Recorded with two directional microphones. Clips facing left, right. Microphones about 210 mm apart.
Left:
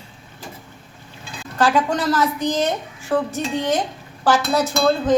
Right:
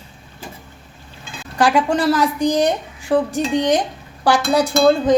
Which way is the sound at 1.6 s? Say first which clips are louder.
Right 3 dB; 10° right (ahead or behind).